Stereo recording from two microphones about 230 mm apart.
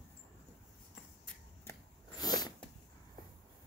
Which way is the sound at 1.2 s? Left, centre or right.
Centre.